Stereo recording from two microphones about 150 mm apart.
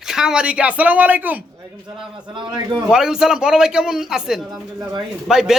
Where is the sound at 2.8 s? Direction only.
5° right (ahead or behind).